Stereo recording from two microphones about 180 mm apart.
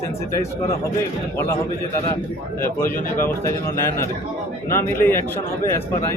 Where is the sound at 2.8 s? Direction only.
50° left (ahead or behind).